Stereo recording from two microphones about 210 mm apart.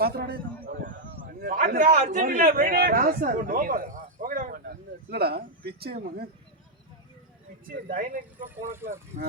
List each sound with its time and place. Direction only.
0.0 s a man's voice: 45° right (ahead or behind)
0.9 s a sound: 55° right (ahead or behind)
1.5 s a man's voice: 40° right (ahead or behind)
7.9 s speech: 40° right (ahead or behind)
8.4 s speech: 10° right (ahead or behind)
9.1 s speech: 35° right (ahead or behind)